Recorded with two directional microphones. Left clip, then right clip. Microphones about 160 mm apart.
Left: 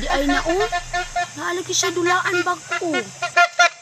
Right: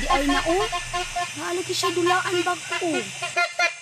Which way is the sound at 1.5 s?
45° left (ahead or behind).